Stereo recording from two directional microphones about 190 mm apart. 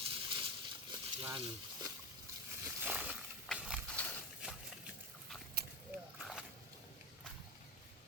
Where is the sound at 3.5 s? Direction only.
5° left (ahead or behind).